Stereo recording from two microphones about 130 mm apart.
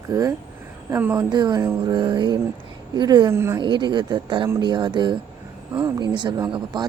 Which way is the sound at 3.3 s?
20° right (ahead or behind).